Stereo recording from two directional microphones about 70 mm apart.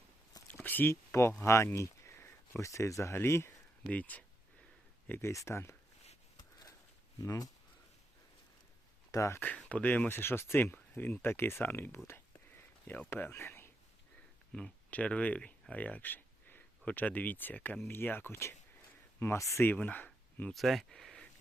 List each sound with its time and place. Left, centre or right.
0.5 s a sound: left
1.4 s speech: left
3.9 s speech: left
5.2 s speech: left
6.3 s a sound: left
7.2 s speech: left
9.1 s speech: left
9.4 s speech: left
12.0 s a sound: left
13.1 s speech: left
14.5 s speech: centre
19.2 s speech: left
19.6 s speech: left
20.5 s speech: centre